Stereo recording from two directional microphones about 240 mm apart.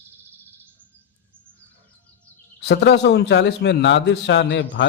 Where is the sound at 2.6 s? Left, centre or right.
Left.